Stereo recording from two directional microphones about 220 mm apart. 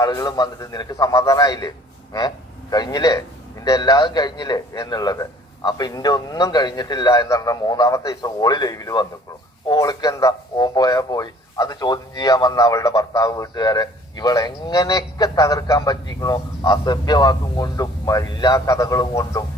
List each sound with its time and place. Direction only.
0.0 s a man's voice: 15° left (ahead or behind)